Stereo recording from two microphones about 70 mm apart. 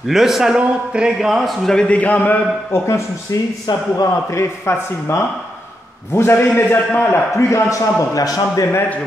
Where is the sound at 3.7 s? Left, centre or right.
Left.